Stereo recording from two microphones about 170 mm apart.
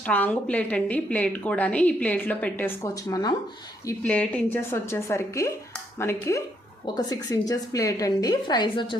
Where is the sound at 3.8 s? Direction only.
10° left (ahead or behind).